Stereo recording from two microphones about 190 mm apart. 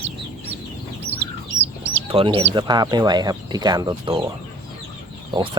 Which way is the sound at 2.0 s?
30° right (ahead or behind).